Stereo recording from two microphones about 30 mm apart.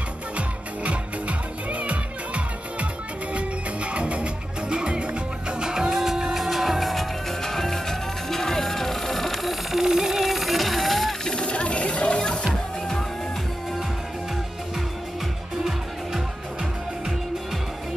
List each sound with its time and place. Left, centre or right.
0.4 s music: right
5.7 s music: right
5.9 s music: centre
9.8 s music: centre
11.2 s mechanisms: left